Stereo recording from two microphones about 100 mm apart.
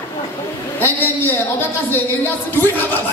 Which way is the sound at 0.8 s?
20° left (ahead or behind).